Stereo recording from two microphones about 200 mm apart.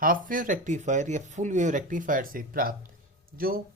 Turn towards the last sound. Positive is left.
turn(degrees=-45)  # may be behind; listen again after turning